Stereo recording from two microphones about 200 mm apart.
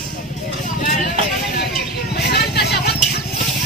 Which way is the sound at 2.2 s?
55° left (ahead or behind).